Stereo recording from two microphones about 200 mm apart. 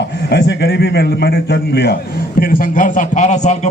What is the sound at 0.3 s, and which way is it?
A man's voice, 55° left (ahead or behind).